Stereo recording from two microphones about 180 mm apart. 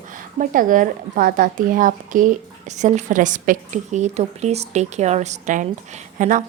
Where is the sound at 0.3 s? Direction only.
50° right (ahead or behind).